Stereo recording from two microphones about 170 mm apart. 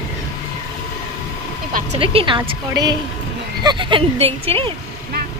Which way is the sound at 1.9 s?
30° right (ahead or behind).